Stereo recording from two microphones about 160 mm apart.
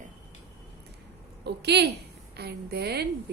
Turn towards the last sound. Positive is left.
turn(degrees=-90)